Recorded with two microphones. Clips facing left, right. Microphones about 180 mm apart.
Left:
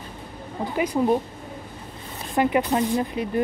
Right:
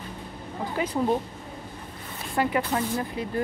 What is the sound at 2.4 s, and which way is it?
Speech, 20° left (ahead or behind).